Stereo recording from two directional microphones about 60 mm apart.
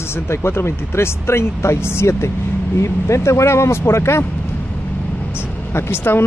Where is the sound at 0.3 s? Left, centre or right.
Left.